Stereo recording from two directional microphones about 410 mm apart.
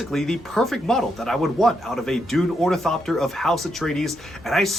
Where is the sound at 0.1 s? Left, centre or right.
Centre.